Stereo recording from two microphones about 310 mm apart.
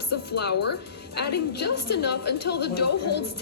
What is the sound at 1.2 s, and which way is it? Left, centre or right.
A woman's voice, left.